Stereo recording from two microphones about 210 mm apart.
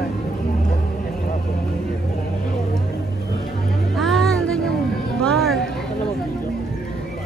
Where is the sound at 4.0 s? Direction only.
Centre (ahead or behind).